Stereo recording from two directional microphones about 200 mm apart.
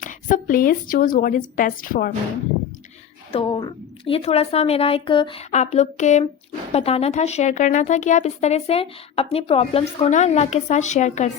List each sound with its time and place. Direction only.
0.0 s a woman's voice: 40° left (ahead or behind)
3.3 s a woman's voice: 25° left (ahead or behind)